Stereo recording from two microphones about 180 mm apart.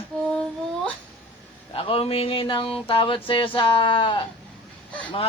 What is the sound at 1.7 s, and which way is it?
A man's voice, 30° left (ahead or behind).